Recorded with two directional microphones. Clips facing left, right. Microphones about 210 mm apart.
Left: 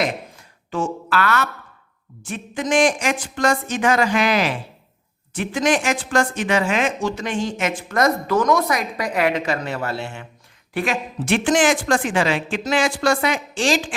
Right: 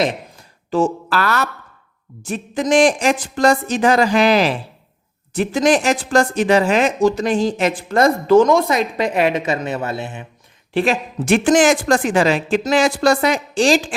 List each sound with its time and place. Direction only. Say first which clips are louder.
0.7 s speech: right 5 dB; 35° right (ahead or behind); by 10.2 s 20° right (ahead or behind)
11.3 s speech: right 4 dB; 45° right (ahead or behind)